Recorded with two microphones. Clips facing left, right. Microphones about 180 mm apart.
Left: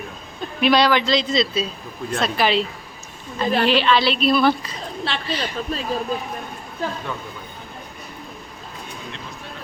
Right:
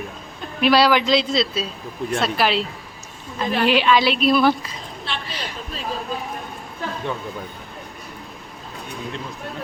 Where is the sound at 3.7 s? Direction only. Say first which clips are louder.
Right 3 dB; 10° right (ahead or behind).